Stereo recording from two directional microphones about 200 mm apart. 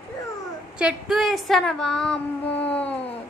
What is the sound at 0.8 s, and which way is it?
Female singing, 5° right (ahead or behind).